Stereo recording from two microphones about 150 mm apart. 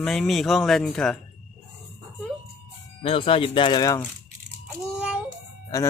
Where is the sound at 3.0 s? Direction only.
35° left (ahead or behind).